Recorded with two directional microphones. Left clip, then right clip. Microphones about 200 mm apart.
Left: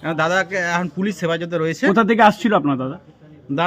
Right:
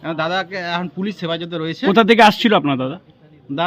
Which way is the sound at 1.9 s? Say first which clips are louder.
Right 3 dB; 50° right (ahead or behind).